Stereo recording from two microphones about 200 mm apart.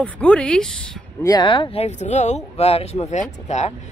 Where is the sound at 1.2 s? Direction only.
20° left (ahead or behind).